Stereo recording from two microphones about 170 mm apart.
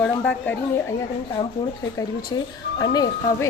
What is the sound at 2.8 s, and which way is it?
Speech, 25° left (ahead or behind).